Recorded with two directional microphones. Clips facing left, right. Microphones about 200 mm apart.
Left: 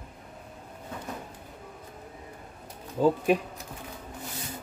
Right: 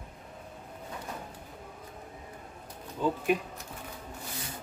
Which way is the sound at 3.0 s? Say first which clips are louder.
Left 7 dB; 40° left (ahead or behind).